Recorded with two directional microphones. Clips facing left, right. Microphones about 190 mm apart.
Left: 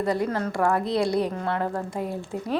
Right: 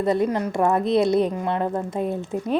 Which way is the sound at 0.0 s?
20° right (ahead or behind).